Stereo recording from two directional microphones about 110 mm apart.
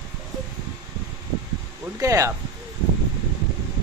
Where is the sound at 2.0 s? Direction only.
30° right (ahead or behind).